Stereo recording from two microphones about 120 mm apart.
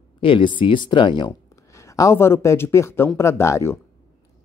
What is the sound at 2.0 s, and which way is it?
Speech, 25° left (ahead or behind).